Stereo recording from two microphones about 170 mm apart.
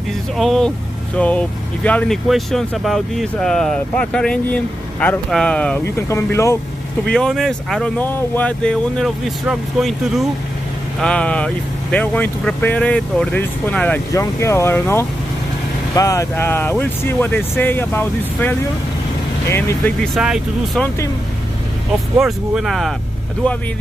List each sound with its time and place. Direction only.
0.4 s speech: 5° left (ahead or behind)
7.1 s speech: 5° left (ahead or behind)
20.2 s speech: 5° right (ahead or behind)
22.2 s speech: centre (ahead or behind)